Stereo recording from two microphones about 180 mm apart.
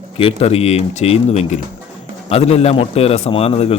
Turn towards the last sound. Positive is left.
turn(degrees=35)  # may be behind; listen again after turning